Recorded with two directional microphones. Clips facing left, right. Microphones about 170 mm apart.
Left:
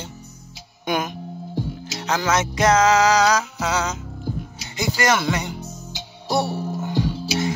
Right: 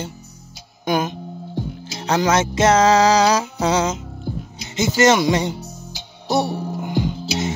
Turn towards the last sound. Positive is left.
turn(degrees=-15)  # may be behind; listen again after turning